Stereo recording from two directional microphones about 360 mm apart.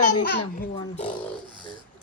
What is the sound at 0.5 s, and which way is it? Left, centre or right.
Speech, left.